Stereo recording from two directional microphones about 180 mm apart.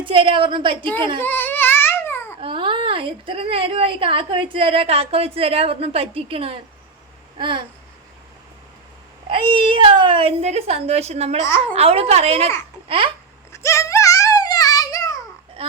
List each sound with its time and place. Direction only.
0.0 s a woman's voice: 30° right (ahead or behind)
1.2 s babbling: 10° left (ahead or behind)
2.4 s a woman's voice: 30° right (ahead or behind)
7.3 s babbling: 25° right (ahead or behind)
9.3 s a woman's voice: 30° right (ahead or behind)
13.5 s a sound: 15° left (ahead or behind)